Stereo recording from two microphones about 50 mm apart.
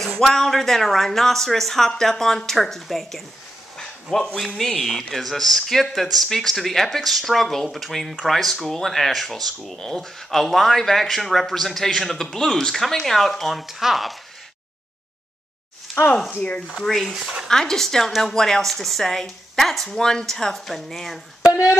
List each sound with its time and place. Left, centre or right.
0.0 s speech: centre
3.7 s a sound: centre
4.6 s speech: centre
16.3 s speech: left
17.0 s speech: centre
17.5 s a woman's voice: centre